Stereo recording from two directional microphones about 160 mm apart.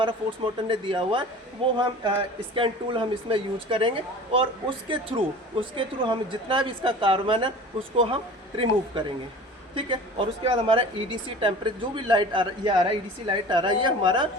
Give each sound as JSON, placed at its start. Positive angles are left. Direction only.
{"t": 0.0, "sound": "a man's voice", "side_deg": -30}
{"t": 5.5, "sound": "speech", "side_deg": -30}